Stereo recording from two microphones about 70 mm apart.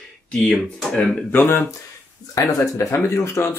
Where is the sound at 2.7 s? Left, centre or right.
Left.